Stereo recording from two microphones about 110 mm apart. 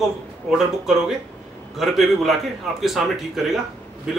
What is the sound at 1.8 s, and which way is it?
Speech, centre (ahead or behind).